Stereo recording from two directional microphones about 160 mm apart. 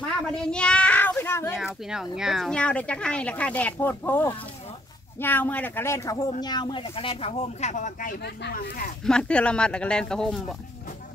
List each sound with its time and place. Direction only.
0.4 s a child's voice: 5° left (ahead or behind)
1.6 s speech: 5° right (ahead or behind); by 8.9 s 65° left (ahead or behind)
9.0 s speech: 5° left (ahead or behind)